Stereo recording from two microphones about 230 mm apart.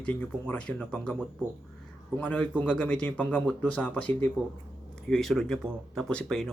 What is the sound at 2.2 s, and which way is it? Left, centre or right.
A man's voice, centre.